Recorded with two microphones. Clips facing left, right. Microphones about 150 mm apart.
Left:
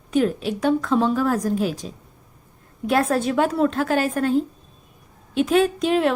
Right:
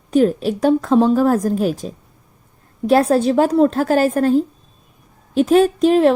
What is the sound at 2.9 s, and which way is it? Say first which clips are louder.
A woman's voice: right 6 dB; 35° right (ahead or behind).